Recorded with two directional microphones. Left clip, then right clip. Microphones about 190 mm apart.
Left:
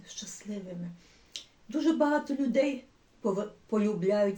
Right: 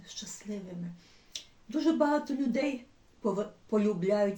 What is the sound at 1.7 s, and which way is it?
Speech, 5° left (ahead or behind).